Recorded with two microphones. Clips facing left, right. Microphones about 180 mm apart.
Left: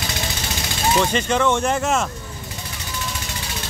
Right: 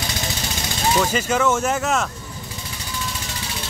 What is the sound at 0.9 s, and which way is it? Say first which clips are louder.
Speech: left 1 dB; 5° right (ahead or behind).